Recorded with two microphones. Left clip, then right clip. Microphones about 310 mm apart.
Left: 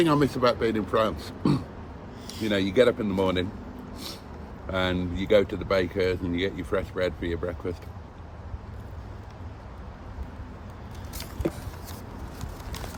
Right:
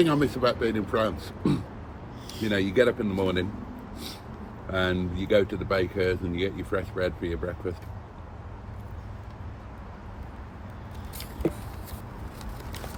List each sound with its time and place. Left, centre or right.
0.0 s speech: centre
3.9 s a sound: centre
4.7 s speech: centre